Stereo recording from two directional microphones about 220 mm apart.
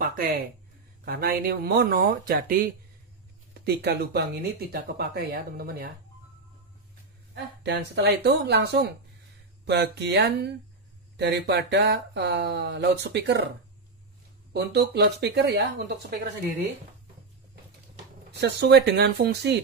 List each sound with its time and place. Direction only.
0.0 s speech: 40° right (ahead or behind)
7.6 s speech: 50° right (ahead or behind)
14.5 s speech: 50° right (ahead or behind)
18.3 s speech: 50° right (ahead or behind)